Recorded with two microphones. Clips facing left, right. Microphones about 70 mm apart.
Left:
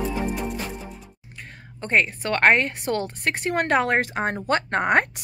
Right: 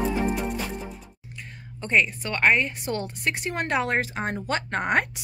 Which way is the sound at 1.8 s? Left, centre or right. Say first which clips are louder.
Left 1 dB; left.